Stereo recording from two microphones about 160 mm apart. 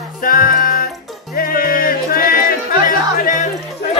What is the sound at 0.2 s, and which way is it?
Music, 60° left (ahead or behind).